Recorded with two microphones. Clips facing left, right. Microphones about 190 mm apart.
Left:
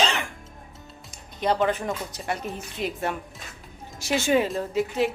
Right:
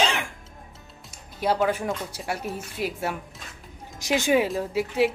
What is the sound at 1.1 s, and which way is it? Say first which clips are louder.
A woman's voice: even; 5° right (ahead or behind).